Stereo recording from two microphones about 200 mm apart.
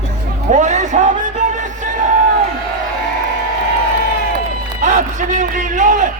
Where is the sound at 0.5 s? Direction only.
35° right (ahead or behind).